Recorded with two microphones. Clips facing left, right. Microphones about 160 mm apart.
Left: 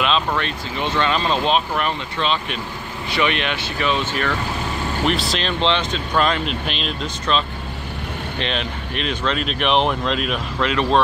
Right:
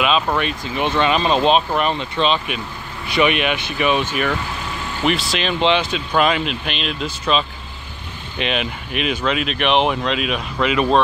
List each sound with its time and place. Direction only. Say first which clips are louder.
0.0 s speech: right 2 dB; 10° right (ahead or behind)
5.0 s speech: right 3 dB; centre (ahead or behind)